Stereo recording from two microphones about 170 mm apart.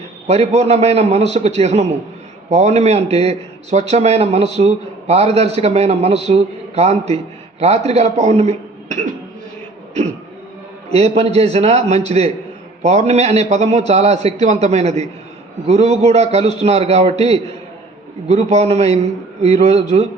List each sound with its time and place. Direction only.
0.3 s a man's voice: 40° right (ahead or behind)
10.9 s a man's voice: 40° right (ahead or behind)